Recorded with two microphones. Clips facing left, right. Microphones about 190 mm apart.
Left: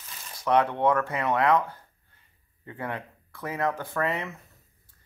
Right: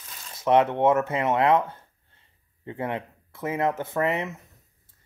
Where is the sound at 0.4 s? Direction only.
25° right (ahead or behind).